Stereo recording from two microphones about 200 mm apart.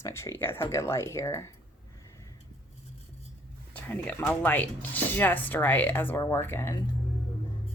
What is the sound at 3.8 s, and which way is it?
Speech, 5° left (ahead or behind).